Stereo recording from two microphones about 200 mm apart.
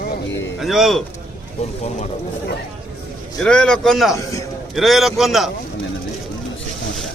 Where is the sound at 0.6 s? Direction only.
Centre (ahead or behind).